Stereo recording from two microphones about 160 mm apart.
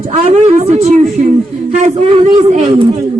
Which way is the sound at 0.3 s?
40° right (ahead or behind).